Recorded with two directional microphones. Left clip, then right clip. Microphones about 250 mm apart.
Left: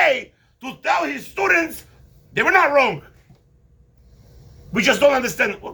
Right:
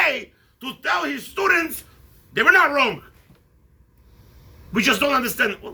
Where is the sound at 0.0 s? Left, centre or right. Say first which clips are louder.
Left 3 dB; centre.